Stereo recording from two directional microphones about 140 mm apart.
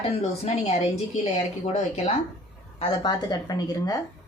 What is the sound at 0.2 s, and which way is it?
Speech, 50° left (ahead or behind).